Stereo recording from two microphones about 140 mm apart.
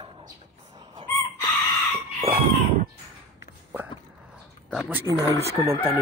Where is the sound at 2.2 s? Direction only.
55° right (ahead or behind).